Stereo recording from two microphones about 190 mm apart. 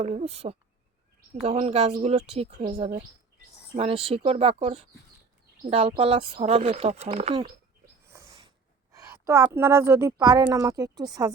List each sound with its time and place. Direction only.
0.0 s speech: 35° right (ahead or behind)
6.0 s speech: 30° right (ahead or behind)
8.1 s a sound: 15° right (ahead or behind)
8.9 s a woman's voice: 15° right (ahead or behind)